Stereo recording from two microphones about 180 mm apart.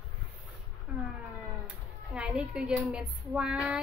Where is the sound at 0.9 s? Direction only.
5° right (ahead or behind).